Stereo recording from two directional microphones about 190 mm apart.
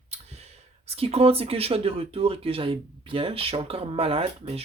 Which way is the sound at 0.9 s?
30° right (ahead or behind).